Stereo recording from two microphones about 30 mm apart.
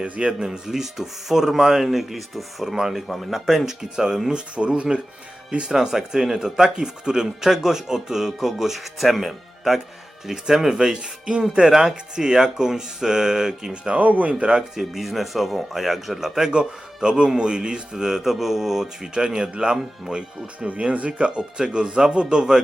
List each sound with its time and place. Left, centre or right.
0.0 s speech: right
0.3 s speech: centre
2.6 s speech: centre
3.1 s speech: centre
3.9 s speech: right; by 9.8 s centre
10.3 s speech: right
11.7 s speech: centre
13.9 s speech: right
14.8 s speech: centre
16.2 s speech: centre
16.5 s speech: right
17.9 s speech: centre
19.1 s speech: right